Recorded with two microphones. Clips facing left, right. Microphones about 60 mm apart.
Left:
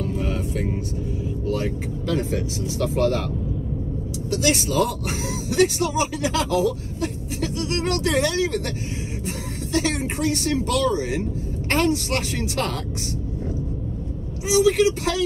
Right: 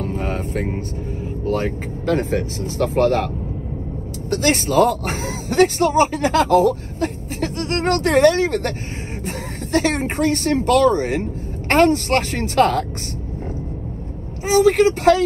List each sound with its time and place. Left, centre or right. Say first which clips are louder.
0.0 s vehicle: right 2 dB; right
1.4 s speech: right 5 dB; right
4.3 s speech: right 4 dB; right
14.5 s speech: right 4 dB; right